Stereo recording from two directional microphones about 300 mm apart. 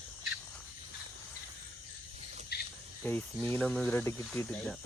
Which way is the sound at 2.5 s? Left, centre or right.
Left.